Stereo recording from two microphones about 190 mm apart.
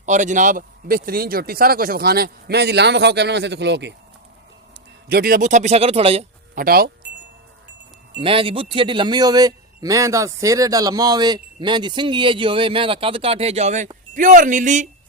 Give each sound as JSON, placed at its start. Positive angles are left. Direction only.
{"t": 0.0, "sound": "speech", "side_deg": -40}
{"t": 5.0, "sound": "speech", "side_deg": -50}
{"t": 6.6, "sound": "speech", "side_deg": -55}
{"t": 8.2, "sound": "speech", "side_deg": -30}